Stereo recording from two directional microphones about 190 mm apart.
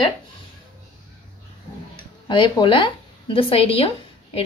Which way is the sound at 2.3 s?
25° left (ahead or behind).